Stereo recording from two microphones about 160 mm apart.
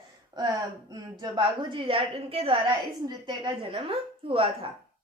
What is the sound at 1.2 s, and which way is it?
A woman's voice, 30° right (ahead or behind).